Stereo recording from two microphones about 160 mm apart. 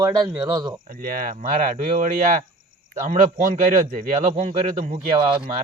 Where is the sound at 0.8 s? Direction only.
60° right (ahead or behind).